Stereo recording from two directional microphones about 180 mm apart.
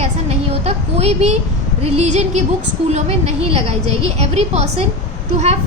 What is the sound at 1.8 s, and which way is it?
A woman's voice, 40° right (ahead or behind).